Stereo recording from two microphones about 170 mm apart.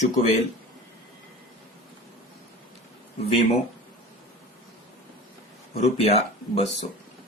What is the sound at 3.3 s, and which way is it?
Speech, 35° left (ahead or behind).